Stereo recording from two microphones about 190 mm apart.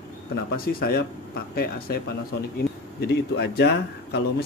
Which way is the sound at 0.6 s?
55° left (ahead or behind).